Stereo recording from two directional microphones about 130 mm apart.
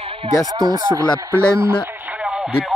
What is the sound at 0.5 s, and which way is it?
Speech, 30° right (ahead or behind).